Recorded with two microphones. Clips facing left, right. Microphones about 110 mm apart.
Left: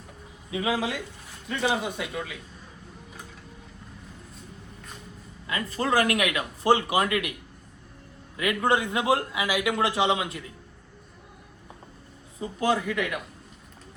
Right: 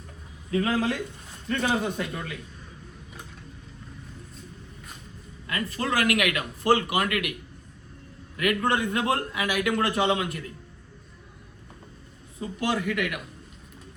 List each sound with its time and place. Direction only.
0.5 s speech: 10° left (ahead or behind)
5.6 s a man's voice: 30° left (ahead or behind)
8.4 s a man's voice: 20° left (ahead or behind)
12.4 s a man's voice: 25° left (ahead or behind)